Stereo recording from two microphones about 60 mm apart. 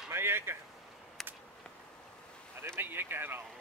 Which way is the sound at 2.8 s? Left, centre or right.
Right.